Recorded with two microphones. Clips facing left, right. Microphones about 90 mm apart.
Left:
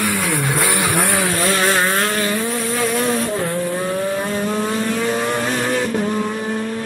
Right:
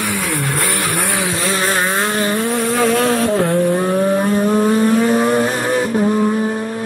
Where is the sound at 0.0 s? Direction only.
Centre (ahead or behind).